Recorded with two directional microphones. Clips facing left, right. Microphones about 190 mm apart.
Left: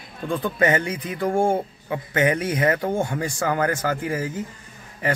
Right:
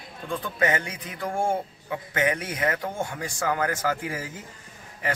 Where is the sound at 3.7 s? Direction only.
55° left (ahead or behind).